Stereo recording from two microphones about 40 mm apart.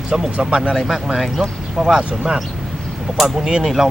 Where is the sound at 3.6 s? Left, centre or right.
Centre.